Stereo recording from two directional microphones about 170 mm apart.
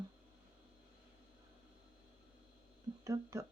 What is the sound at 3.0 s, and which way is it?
Speech, 20° right (ahead or behind).